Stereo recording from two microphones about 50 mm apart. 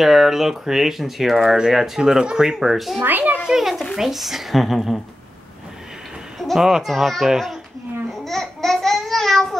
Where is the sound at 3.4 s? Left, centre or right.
Centre.